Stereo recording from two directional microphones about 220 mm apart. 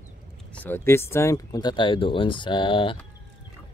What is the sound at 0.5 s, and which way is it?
Speech, 10° left (ahead or behind).